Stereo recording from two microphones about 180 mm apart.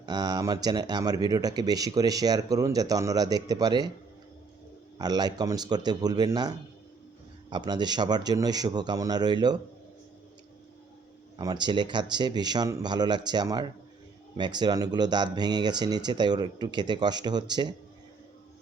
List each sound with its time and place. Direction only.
0.0 s speech: 20° right (ahead or behind)
4.9 s speech: 20° right (ahead or behind)
7.5 s speech: 25° right (ahead or behind)
11.3 s speech: 25° right (ahead or behind)